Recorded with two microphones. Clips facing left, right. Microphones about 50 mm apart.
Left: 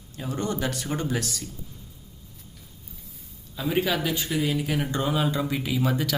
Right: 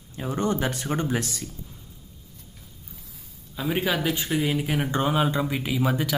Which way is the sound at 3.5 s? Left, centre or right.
Centre.